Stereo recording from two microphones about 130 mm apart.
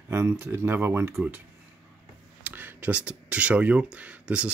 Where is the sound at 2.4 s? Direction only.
15° right (ahead or behind).